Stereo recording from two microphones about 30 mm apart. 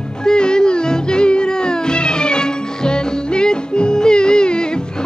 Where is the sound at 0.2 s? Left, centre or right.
Left.